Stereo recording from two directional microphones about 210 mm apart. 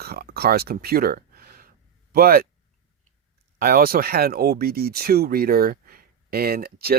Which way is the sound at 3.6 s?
45° right (ahead or behind).